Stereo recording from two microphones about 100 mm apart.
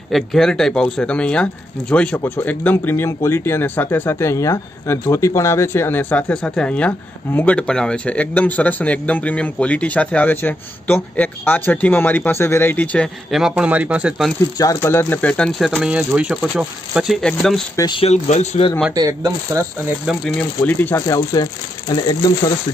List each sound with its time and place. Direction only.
0.1 s speech: 5° left (ahead or behind)
13.3 s a man's voice: 5° right (ahead or behind)
14.6 s speech: 30° left (ahead or behind)
15.3 s speech: 10° left (ahead or behind)
15.8 s speech: 10° right (ahead or behind)
17.2 s a man's voice: 5° left (ahead or behind)
17.8 s speech: 30° left (ahead or behind)
18.6 s speech: 80° left
18.9 s speech: 35° right (ahead or behind)
20.3 s speech: 15° left (ahead or behind)
20.9 s speech: 35° left (ahead or behind)